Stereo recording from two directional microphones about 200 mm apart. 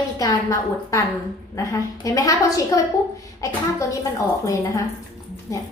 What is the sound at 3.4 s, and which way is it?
Speech, 15° left (ahead or behind).